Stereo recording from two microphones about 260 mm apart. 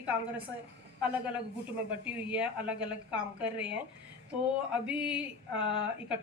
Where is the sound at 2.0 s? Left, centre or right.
Centre.